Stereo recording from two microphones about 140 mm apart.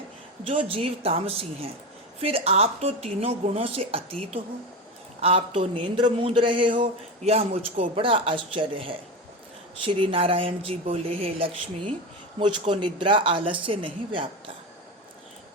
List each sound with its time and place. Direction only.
0.4 s a woman's voice: 40° right (ahead or behind)
7.2 s speech: 45° right (ahead or behind)